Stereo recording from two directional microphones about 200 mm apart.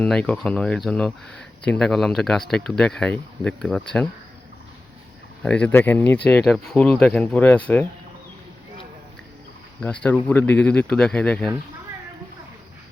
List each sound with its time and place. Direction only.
0.0 s speech: 5° left (ahead or behind)
5.4 s speech: 5° left (ahead or behind)
9.8 s speech: 5° left (ahead or behind)